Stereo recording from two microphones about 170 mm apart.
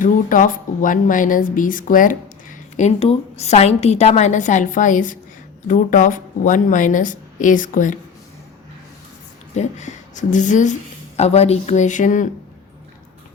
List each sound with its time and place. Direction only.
0.0 s a woman's voice: 50° left (ahead or behind)
9.6 s a woman's voice: 45° left (ahead or behind)